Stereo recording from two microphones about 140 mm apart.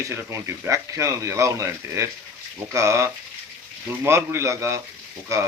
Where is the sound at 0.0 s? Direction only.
20° right (ahead or behind).